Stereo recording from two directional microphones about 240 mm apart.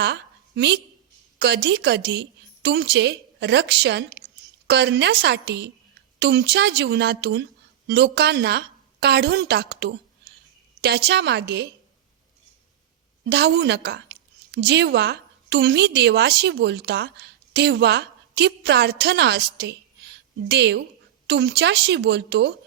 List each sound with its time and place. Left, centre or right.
0.0 s a woman's voice: right
13.3 s a woman's voice: right